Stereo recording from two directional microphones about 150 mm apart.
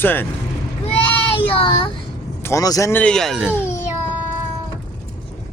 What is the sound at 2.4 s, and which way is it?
Speech, 20° left (ahead or behind).